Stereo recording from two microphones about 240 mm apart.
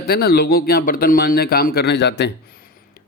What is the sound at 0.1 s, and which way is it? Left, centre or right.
A man's voice, left.